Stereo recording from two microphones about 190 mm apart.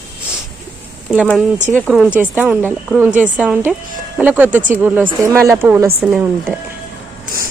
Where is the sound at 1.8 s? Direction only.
5° right (ahead or behind).